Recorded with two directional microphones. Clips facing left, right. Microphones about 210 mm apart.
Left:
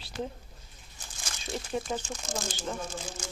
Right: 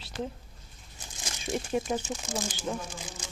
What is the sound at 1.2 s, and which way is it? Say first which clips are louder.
Speech: right 4 dB; 20° right (ahead or behind).